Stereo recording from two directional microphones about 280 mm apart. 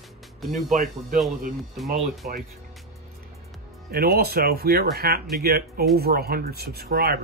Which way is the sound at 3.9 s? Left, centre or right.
Right.